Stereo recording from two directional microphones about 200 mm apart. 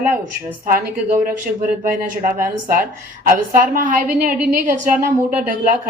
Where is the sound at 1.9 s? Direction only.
45° right (ahead or behind).